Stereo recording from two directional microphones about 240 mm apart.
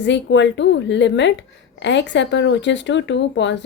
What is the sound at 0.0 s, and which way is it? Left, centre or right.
A woman's voice, left.